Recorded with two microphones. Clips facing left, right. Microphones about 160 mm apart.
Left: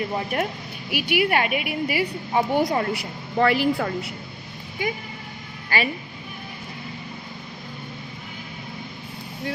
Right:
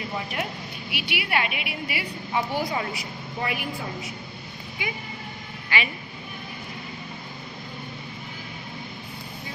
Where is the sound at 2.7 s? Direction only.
60° left (ahead or behind); by 3.9 s 75° left (ahead or behind).